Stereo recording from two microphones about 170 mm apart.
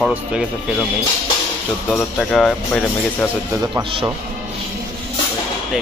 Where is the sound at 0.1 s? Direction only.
5° right (ahead or behind).